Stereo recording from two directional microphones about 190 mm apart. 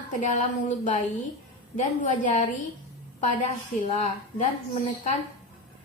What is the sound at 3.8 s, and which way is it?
A woman's voice, 40° left (ahead or behind).